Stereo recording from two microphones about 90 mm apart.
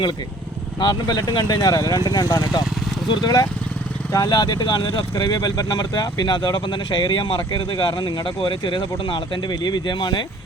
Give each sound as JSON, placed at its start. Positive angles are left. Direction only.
{"t": 0.8, "sound": "speech", "side_deg": 55}